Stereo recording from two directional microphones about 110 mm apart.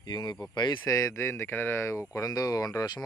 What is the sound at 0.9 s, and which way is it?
Speech, 30° left (ahead or behind).